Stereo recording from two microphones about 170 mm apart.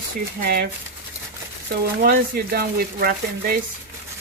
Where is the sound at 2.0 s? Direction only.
65° right (ahead or behind).